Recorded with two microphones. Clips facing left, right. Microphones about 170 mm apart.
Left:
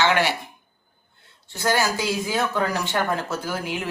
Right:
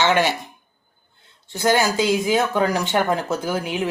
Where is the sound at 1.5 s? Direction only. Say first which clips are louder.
Right 4 dB; 20° right (ahead or behind).